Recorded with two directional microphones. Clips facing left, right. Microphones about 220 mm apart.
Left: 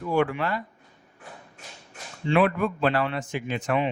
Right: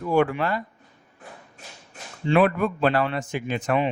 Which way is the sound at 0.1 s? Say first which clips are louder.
Right 3 dB; 45° right (ahead or behind).